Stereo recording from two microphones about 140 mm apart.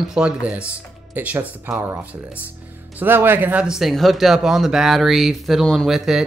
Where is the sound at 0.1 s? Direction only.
5° right (ahead or behind).